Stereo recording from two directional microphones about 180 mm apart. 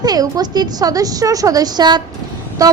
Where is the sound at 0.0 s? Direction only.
20° right (ahead or behind).